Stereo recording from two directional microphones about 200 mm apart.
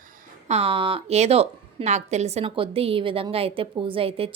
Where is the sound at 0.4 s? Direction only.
30° right (ahead or behind).